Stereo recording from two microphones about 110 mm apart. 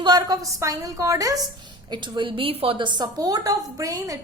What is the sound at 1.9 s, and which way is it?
A woman's voice, 45° right (ahead or behind).